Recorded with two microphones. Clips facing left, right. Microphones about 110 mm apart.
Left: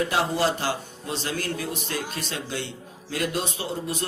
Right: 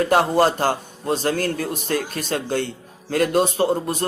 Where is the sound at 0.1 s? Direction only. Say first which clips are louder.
Right 7 dB; 50° right (ahead or behind).